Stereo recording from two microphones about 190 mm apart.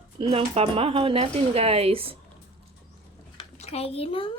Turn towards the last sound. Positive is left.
turn(degrees=30)  # may be behind; listen again after turning